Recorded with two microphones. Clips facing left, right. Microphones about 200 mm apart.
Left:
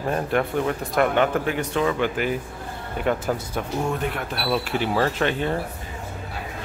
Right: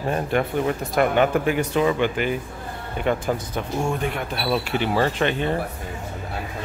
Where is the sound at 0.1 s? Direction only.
5° right (ahead or behind).